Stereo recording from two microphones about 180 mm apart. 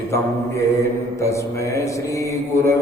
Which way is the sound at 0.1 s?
15° left (ahead or behind).